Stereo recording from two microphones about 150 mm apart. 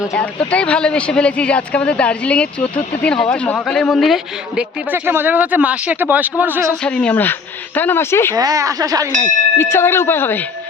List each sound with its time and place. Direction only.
0.1 s speech: 10° left (ahead or behind)
4.9 s speech: 15° right (ahead or behind)
6.7 s speech: 5° left (ahead or behind)
8.4 s speech: 25° right (ahead or behind)
9.6 s speech: 15° left (ahead or behind)